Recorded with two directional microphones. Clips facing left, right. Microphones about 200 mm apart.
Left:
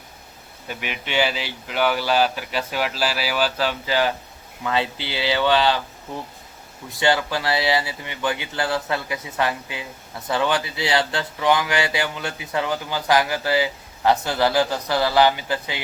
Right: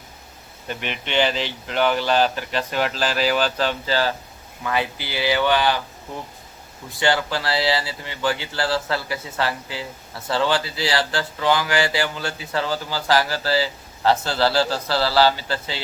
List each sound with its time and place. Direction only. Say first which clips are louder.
0.7 s speech: right 1 dB; 5° left (ahead or behind); by 5.8 s 25° left (ahead or behind)
7.0 s speech: left 1 dB; 20° left (ahead or behind)